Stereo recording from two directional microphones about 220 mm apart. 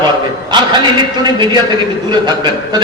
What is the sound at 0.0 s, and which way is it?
Speech, 20° right (ahead or behind).